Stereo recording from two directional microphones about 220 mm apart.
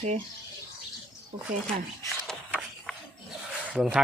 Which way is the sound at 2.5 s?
5° right (ahead or behind).